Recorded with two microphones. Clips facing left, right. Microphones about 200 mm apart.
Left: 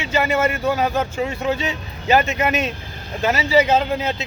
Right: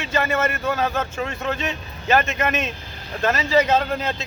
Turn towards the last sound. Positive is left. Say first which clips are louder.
# left 2 dB
turn(degrees=10)  # may be behind; listen again after turning